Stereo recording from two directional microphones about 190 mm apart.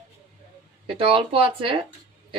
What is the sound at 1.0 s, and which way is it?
Speech, 30° right (ahead or behind).